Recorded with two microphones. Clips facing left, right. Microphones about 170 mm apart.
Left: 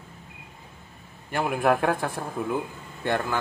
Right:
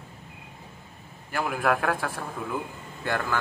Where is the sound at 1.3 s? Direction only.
25° left (ahead or behind).